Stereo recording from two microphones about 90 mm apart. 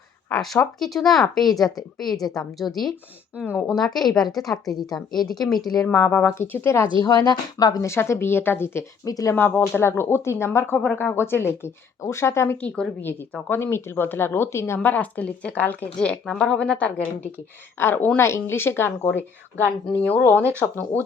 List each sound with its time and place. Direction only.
0.3 s speech: 10° left (ahead or behind)
4.6 s a woman's voice: 45° left (ahead or behind)
5.3 s speech: centre (ahead or behind)
5.9 s a woman's voice: 20° left (ahead or behind)
7.0 s a woman's voice: 50° left (ahead or behind)
7.9 s a woman's voice: 30° left (ahead or behind)
9.0 s speech: 40° left (ahead or behind)
9.3 s a woman's voice: 20° left (ahead or behind)
12.6 s a woman's voice: 15° left (ahead or behind)
13.5 s a woman's voice: 30° left (ahead or behind)
14.8 s a woman's voice: 15° left (ahead or behind)
17.7 s a woman's voice: 25° left (ahead or behind)
20.3 s speech: 25° right (ahead or behind)
20.6 s a woman's voice: 20° left (ahead or behind)